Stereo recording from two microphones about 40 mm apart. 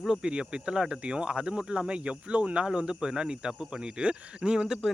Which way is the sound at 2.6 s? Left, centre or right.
Right.